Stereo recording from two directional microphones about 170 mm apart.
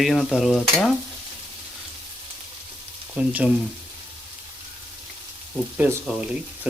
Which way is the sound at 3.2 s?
5° right (ahead or behind).